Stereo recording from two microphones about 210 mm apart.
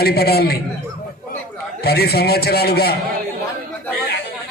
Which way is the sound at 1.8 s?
45° left (ahead or behind).